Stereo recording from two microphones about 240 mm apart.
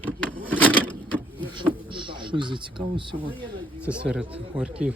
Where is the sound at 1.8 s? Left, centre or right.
Right.